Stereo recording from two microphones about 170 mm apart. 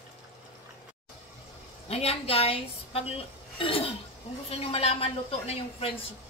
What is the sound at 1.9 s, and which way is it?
A woman's voice, 35° left (ahead or behind).